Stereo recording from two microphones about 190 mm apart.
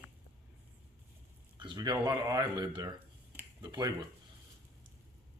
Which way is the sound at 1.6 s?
25° right (ahead or behind).